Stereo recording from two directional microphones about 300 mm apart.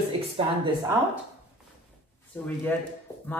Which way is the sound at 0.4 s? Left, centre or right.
Centre.